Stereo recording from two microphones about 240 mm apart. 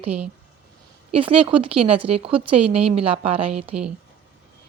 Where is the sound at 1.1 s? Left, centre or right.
Right.